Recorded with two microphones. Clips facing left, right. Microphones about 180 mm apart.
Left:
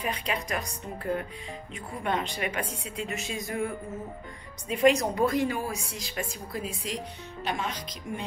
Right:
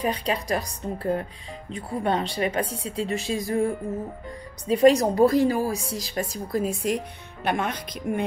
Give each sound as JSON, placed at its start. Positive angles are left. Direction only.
{"t": 0.0, "sound": "a woman's voice", "side_deg": -35}